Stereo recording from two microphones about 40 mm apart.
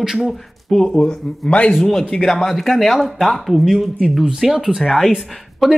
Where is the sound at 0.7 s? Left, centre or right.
Centre.